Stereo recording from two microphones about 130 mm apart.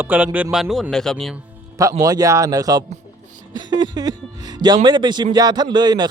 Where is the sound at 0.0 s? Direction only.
15° right (ahead or behind).